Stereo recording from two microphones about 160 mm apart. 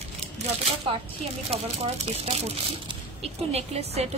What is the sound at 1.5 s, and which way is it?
Speech, 40° right (ahead or behind).